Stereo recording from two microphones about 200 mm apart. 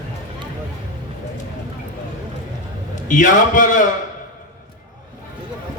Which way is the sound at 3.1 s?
40° left (ahead or behind).